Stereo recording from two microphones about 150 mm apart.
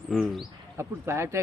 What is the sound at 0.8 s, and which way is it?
Speech, 20° right (ahead or behind).